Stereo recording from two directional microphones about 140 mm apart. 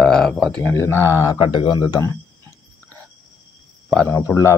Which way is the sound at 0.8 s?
20° left (ahead or behind).